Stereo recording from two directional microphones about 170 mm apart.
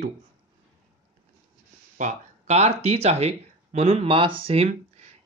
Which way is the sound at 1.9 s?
45° right (ahead or behind).